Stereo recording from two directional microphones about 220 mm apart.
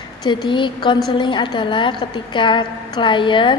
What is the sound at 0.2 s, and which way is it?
A woman's voice, 20° left (ahead or behind).